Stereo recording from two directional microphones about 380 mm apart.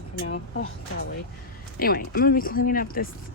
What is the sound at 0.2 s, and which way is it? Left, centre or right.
Speech, left.